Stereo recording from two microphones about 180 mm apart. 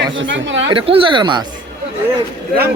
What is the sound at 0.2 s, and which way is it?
Speech, 90° right.